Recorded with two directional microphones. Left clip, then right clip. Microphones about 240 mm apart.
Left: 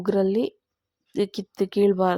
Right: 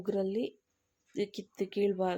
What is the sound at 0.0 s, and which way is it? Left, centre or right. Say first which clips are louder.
Speech: left 10 dB; left.